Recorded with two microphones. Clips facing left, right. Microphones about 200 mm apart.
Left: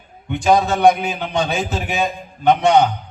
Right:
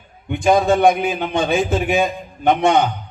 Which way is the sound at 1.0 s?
50° right (ahead or behind).